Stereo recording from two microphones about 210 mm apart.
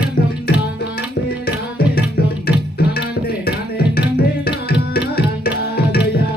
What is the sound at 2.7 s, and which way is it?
Tabla, 50° left (ahead or behind).